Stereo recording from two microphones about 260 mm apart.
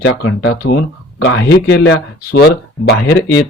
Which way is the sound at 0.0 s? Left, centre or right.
Left.